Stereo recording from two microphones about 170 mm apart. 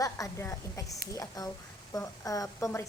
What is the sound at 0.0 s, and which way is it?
A woman's voice, 20° left (ahead or behind).